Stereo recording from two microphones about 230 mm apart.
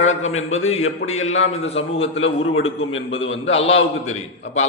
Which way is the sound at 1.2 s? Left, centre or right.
Left.